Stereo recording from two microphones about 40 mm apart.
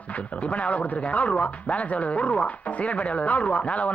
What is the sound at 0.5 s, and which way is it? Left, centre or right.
Speech, left.